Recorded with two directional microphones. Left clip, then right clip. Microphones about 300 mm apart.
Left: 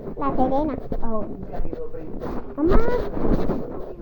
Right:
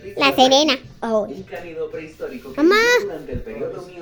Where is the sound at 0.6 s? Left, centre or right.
Right.